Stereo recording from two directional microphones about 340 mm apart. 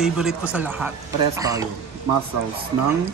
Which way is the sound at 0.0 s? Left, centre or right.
Centre.